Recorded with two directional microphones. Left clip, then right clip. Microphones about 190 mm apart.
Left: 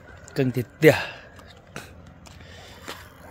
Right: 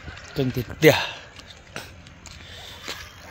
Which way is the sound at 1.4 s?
Centre (ahead or behind).